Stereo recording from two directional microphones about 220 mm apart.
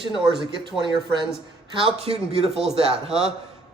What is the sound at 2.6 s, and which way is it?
Speech, centre (ahead or behind).